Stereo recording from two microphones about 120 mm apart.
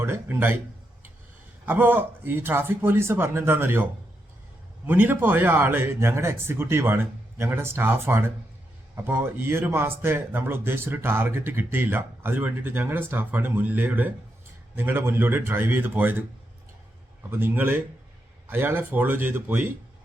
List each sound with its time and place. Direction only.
0.0 s speech: 20° right (ahead or behind)
1.6 s speech: 15° right (ahead or behind)
4.9 s speech: 15° right (ahead or behind)
17.3 s speech: 15° right (ahead or behind)